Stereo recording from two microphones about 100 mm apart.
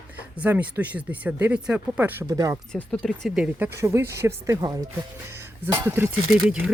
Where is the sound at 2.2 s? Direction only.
35° right (ahead or behind).